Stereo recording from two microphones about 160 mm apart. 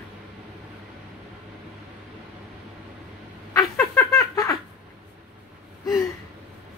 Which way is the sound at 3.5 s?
20° left (ahead or behind).